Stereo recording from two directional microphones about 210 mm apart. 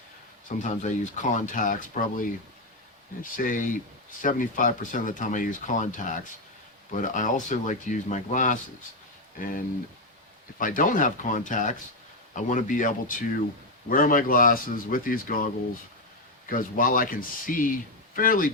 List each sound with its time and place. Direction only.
0.4 s speech: 35° left (ahead or behind)
3.3 s speech: 40° left (ahead or behind)
10.6 s speech: 40° left (ahead or behind)